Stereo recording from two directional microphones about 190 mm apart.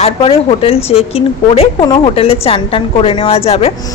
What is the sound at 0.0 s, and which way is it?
A woman's voice, 30° left (ahead or behind).